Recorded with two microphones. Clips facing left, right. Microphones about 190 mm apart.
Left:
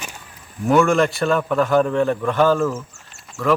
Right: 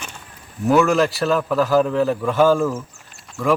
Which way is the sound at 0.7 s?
Centre (ahead or behind).